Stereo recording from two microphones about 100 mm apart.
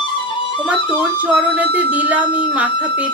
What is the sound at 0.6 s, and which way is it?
Music, 15° right (ahead or behind).